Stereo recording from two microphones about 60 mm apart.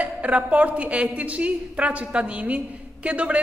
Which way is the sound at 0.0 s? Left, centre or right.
Right.